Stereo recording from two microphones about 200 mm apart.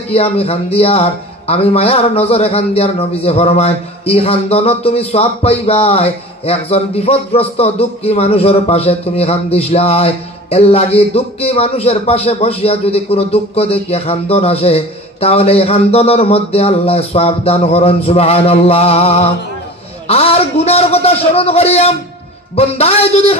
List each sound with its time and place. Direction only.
0.1 s speech: 30° left (ahead or behind)